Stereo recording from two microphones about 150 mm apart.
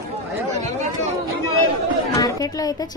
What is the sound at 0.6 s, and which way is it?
Chatter, 45° right (ahead or behind).